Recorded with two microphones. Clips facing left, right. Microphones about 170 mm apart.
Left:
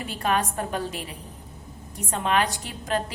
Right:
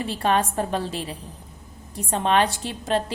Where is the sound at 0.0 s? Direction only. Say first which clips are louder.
Right 3 dB; 30° right (ahead or behind).